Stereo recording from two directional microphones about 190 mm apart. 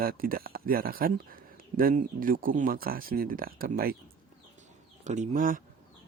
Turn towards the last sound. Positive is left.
turn(degrees=-45)  # may be behind; listen again after turning